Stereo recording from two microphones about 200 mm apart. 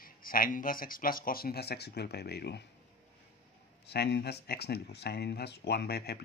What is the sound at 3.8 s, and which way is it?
Speech, 55° left (ahead or behind).